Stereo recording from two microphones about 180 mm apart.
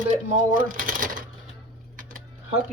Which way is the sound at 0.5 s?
50° right (ahead or behind).